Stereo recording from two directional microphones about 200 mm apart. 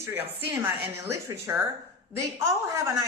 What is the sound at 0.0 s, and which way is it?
A woman's voice, 10° right (ahead or behind).